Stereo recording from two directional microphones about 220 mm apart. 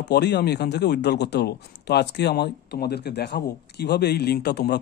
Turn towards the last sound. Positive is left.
turn(degrees=50)  # may be behind; listen again after turning